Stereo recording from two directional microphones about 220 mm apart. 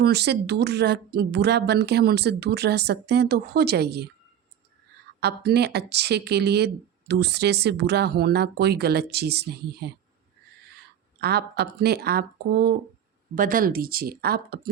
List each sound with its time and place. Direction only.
0.0 s speech: 50° right (ahead or behind)
5.2 s speech: 45° right (ahead or behind)